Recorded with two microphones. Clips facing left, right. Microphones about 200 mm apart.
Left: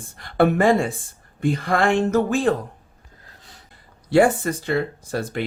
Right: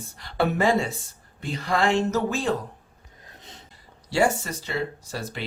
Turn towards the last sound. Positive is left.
turn(degrees=55)  # may be behind; listen again after turning